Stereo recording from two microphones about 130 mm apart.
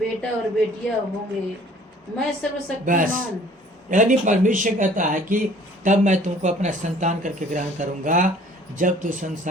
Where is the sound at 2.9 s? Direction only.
90° right.